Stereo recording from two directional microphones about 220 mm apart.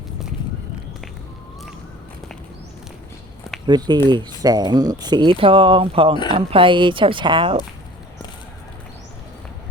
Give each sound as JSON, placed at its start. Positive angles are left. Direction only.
{"t": 3.7, "sound": "speech", "side_deg": -20}